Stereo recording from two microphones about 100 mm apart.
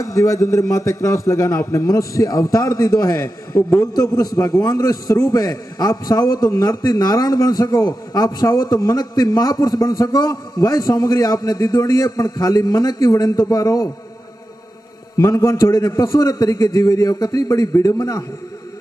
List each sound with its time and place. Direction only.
0.0 s a man's voice: 30° left (ahead or behind)
15.1 s a man's voice: 30° left (ahead or behind)